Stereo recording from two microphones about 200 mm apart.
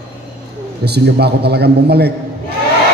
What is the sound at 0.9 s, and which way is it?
A man's voice, 55° right (ahead or behind).